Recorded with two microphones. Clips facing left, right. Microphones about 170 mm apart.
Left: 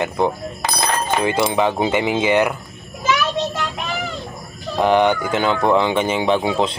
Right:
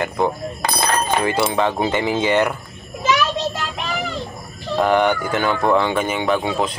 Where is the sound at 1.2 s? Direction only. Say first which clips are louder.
Left 4 dB; 20° left (ahead or behind).